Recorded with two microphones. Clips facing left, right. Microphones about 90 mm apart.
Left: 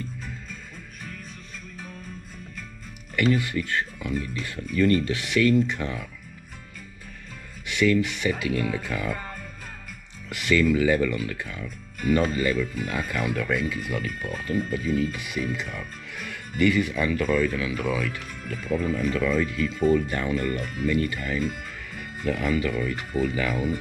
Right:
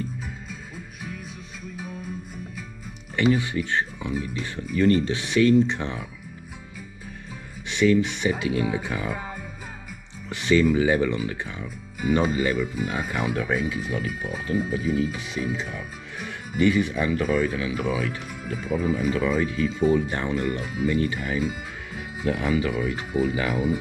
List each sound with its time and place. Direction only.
1.8 s music: 5° right (ahead or behind)
3.3 s speech: 15° right (ahead or behind)
4.7 s speech: 20° right (ahead or behind)
7.7 s speech: 20° right (ahead or behind)
10.4 s speech: 20° right (ahead or behind)
20.1 s speech: 20° right (ahead or behind)
20.3 s speech: 10° right (ahead or behind)